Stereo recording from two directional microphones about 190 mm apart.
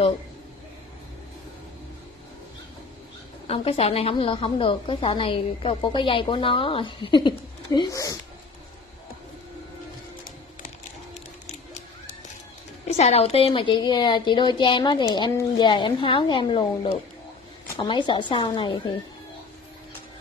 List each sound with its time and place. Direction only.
3.4 s a woman's voice: 30° left (ahead or behind)
12.8 s a woman's voice: 35° left (ahead or behind)